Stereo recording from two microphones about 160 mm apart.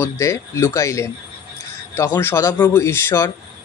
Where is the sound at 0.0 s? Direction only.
20° left (ahead or behind).